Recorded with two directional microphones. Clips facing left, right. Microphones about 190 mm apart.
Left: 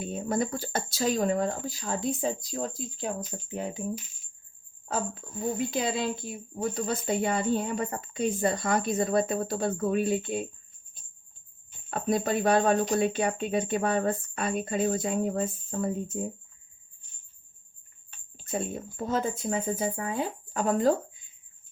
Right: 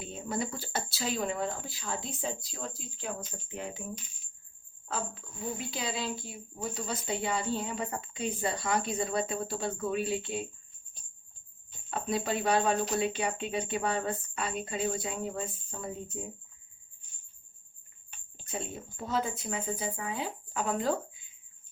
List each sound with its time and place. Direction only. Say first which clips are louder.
0.0 s speech: left 6 dB; 50° left (ahead or behind)
4.9 s speech: left 5 dB; 45° left (ahead or behind)
11.9 s speech: left 5 dB; 50° left (ahead or behind)
18.4 s speech: left 6 dB; 50° left (ahead or behind)